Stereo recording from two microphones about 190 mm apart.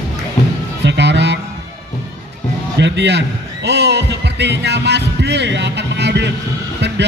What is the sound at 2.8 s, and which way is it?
A man's voice, 65° right (ahead or behind).